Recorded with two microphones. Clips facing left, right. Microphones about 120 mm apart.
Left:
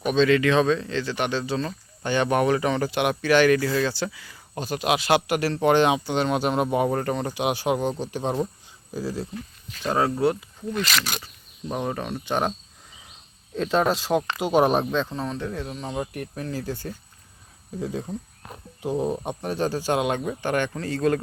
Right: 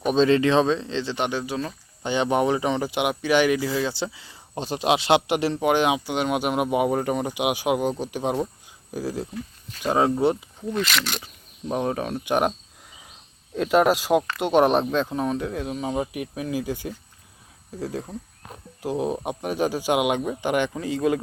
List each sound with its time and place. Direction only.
0.1 s speech: 35° right (ahead or behind)
5.5 s speech: 10° right (ahead or behind)
10.8 s speech: 5° left (ahead or behind)
13.6 s speech: 5° right (ahead or behind)